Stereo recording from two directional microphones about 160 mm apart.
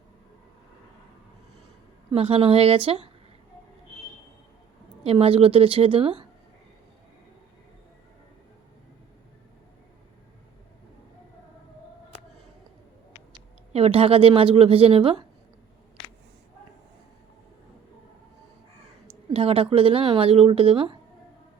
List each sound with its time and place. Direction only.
2.0 s speech: 35° right (ahead or behind)
5.0 s speech: 35° right (ahead or behind)
13.7 s speech: 40° right (ahead or behind)
19.3 s speech: 35° right (ahead or behind)